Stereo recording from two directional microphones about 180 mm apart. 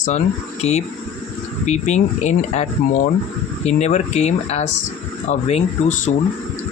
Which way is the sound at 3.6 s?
40° left (ahead or behind).